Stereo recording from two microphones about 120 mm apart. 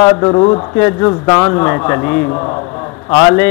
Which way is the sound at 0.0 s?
25° left (ahead or behind).